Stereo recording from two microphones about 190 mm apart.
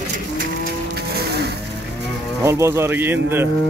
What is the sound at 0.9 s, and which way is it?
Music, 55° right (ahead or behind).